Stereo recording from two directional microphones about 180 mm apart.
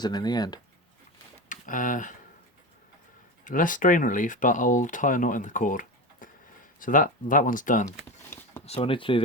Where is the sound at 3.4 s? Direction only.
50° left (ahead or behind).